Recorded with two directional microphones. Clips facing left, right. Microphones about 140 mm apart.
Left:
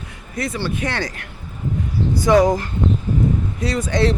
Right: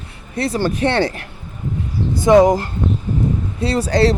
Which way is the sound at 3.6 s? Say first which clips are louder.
Right 6 dB; 30° right (ahead or behind).